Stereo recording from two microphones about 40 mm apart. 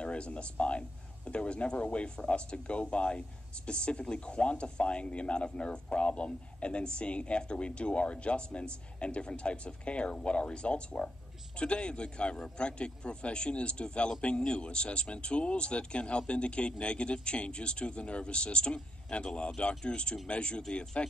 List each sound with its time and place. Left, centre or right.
0.0 s speech: left